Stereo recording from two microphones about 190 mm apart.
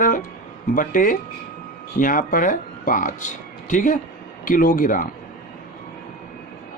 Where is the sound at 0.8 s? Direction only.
45° left (ahead or behind).